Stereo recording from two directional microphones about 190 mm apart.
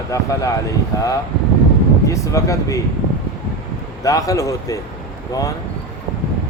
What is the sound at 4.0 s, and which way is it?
A man's voice, 15° left (ahead or behind).